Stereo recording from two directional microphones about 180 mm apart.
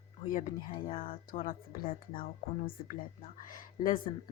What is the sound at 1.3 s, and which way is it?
Speech, 50° left (ahead or behind).